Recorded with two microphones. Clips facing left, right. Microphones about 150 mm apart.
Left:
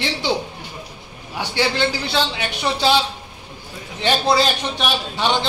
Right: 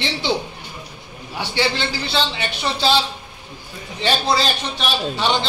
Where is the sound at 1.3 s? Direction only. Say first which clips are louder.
Left 2 dB; 15° left (ahead or behind).